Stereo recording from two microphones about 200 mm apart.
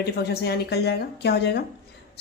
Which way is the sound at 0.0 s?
55° left (ahead or behind).